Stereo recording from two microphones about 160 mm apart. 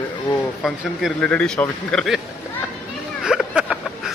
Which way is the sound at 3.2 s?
5° right (ahead or behind).